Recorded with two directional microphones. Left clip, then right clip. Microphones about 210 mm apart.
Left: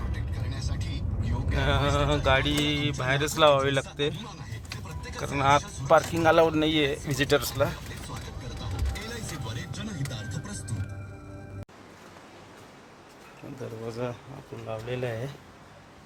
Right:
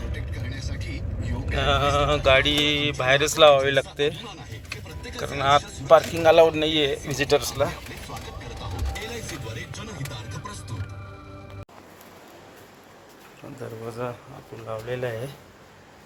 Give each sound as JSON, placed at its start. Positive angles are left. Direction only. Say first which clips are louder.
{"t": 1.5, "sound": "speech", "louder": "right 5 dB", "side_deg": 10}
{"t": 5.1, "sound": "speech", "louder": "right 3 dB", "side_deg": 15}
{"t": 14.0, "sound": "speech", "louder": "right 2 dB", "side_deg": 15}